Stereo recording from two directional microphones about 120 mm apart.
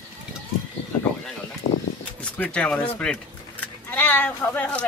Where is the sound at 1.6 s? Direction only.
60° left (ahead or behind).